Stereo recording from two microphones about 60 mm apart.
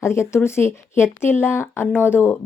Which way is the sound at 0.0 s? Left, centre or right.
Left.